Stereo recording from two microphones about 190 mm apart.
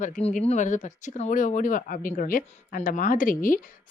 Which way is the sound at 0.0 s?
40° left (ahead or behind).